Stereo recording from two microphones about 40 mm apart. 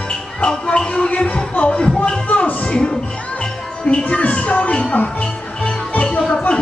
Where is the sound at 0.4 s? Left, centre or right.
Left.